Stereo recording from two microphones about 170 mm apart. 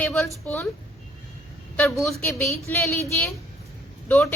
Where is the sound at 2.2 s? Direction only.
5° left (ahead or behind).